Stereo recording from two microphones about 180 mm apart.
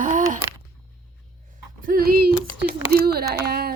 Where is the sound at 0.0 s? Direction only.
45° right (ahead or behind).